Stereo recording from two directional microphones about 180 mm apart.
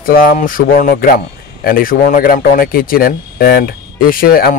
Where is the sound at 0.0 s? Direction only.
50° left (ahead or behind).